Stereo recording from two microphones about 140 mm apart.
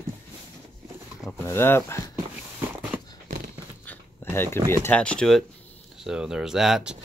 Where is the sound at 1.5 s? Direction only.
15° left (ahead or behind).